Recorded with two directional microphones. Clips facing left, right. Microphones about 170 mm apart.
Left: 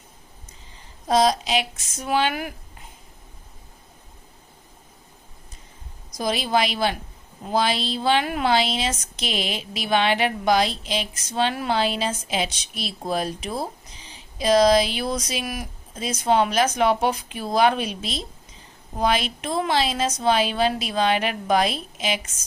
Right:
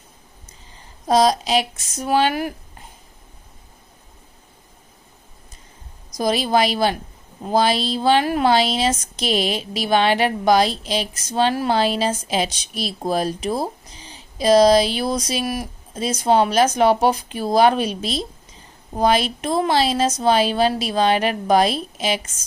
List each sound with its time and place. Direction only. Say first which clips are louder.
1.0 s a woman's voice: right 3 dB; 40° right (ahead or behind)
6.1 s a woman's voice: right 4 dB; 40° right (ahead or behind)